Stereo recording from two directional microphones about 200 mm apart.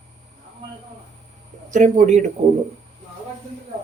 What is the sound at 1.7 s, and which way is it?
Speech, 40° right (ahead or behind).